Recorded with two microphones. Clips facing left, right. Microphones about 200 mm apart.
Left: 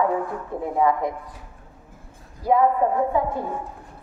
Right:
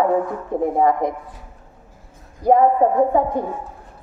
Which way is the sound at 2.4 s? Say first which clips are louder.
Right 5 dB; 20° right (ahead or behind).